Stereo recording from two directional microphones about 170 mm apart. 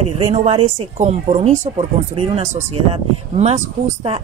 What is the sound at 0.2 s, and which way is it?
Speech, 35° right (ahead or behind).